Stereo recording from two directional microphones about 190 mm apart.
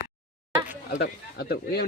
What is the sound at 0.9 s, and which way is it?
Speech, 60° left (ahead or behind).